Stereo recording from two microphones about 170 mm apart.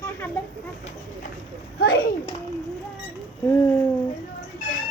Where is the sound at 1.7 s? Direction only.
65° left (ahead or behind).